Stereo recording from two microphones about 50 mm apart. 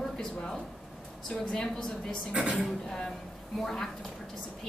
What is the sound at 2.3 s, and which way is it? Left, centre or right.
Speech, right.